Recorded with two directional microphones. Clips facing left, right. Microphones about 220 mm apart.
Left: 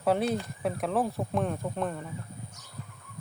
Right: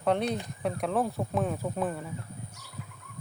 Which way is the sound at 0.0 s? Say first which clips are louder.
Left 1 dB; 5° left (ahead or behind).